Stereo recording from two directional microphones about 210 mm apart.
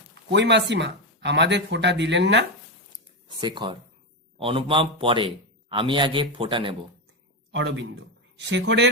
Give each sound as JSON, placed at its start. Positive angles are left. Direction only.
{"t": 0.1, "sound": "speech", "side_deg": -55}
{"t": 3.2, "sound": "a man's voice", "side_deg": -20}
{"t": 7.5, "sound": "speech", "side_deg": -60}